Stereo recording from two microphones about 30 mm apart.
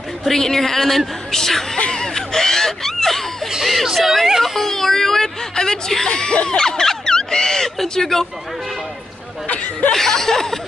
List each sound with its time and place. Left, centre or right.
0.4 s a woman's voice: centre
1.9 s a sound: centre
3.6 s speech: centre
4.6 s a sound: centre
6.0 s speech: left
6.6 s speech: centre
9.9 s a woman's voice: centre